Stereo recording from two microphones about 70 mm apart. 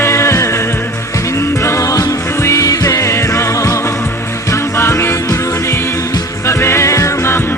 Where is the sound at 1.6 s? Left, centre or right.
Left.